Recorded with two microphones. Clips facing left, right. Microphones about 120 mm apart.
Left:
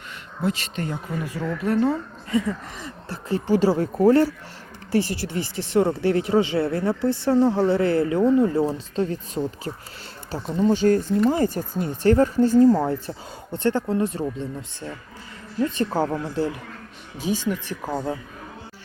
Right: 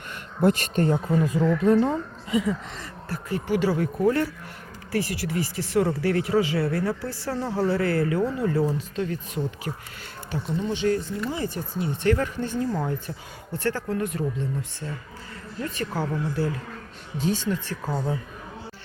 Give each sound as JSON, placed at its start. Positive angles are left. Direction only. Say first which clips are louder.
{"t": 0.4, "sound": "speech", "louder": "right 5 dB", "side_deg": -50}
{"t": 2.8, "sound": "speech", "louder": "left 1 dB", "side_deg": 30}
{"t": 17.2, "sound": "speech", "louder": "left 1 dB", "side_deg": 10}